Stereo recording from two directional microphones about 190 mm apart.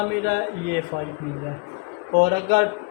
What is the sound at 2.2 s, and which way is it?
Speech, 55° right (ahead or behind).